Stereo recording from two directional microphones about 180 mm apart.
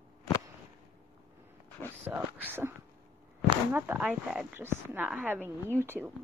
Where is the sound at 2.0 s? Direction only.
10° right (ahead or behind).